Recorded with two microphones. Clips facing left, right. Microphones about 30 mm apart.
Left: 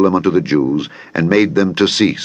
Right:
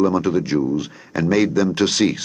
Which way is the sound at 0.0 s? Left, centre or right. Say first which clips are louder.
Left 5 dB; left.